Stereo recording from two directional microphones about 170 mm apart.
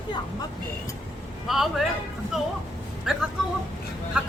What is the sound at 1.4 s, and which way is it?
Speech, centre (ahead or behind).